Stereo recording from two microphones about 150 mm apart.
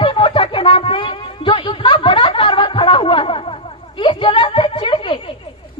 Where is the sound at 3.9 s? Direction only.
35° left (ahead or behind).